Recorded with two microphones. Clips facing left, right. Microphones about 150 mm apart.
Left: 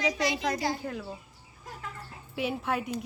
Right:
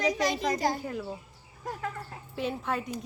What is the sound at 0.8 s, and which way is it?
Speech, centre (ahead or behind).